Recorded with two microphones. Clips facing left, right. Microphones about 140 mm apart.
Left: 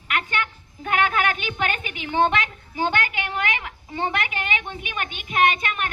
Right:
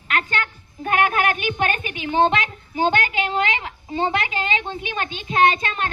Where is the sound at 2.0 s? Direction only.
20° right (ahead or behind).